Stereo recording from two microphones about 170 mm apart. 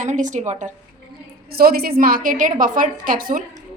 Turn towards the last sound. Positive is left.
turn(degrees=-55)  # may be behind; listen again after turning